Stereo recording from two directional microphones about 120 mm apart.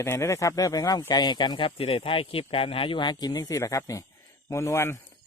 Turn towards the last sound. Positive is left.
turn(degrees=20)  # may be behind; listen again after turning